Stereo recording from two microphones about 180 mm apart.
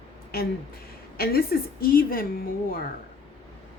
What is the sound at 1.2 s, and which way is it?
A woman's voice, 55° left (ahead or behind).